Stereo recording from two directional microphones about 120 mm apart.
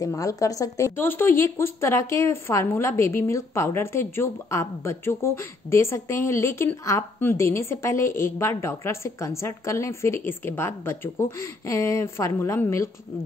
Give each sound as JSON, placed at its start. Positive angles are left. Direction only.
{"t": 0.0, "sound": "a woman's voice", "side_deg": 30}